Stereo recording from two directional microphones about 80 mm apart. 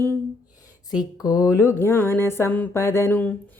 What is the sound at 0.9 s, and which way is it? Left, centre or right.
Mantra, left.